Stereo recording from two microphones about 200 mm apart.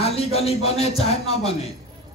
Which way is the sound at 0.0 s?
30° left (ahead or behind).